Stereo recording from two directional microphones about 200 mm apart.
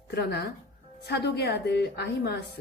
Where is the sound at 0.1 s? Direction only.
55° left (ahead or behind).